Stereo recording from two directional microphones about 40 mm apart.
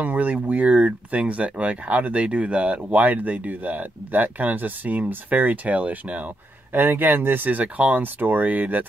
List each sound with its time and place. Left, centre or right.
0.0 s speech: right
2.9 s speech: right
6.7 s speech: right
7.4 s speech: right
8.2 s speech: right